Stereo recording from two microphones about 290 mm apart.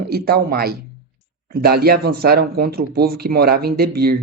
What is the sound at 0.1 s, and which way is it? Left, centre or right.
Speech, right.